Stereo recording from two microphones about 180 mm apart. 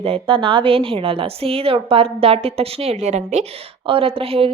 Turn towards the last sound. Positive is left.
turn(degrees=-30)  # may be behind; listen again after turning